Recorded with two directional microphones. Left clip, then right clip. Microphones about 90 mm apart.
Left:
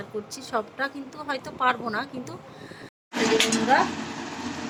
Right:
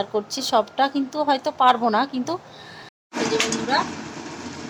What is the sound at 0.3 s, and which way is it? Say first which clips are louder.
A woman's voice: right 9 dB; 40° right (ahead or behind).